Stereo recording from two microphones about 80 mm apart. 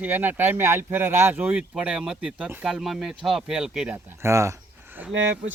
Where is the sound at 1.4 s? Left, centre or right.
Centre.